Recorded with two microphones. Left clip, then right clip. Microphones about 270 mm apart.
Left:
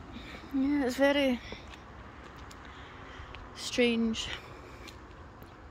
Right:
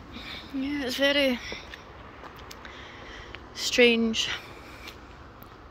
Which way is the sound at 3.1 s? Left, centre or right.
Centre.